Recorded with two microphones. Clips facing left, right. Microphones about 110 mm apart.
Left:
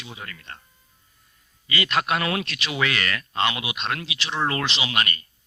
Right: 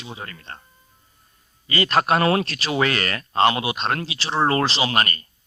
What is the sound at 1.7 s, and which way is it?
Speech, 35° right (ahead or behind).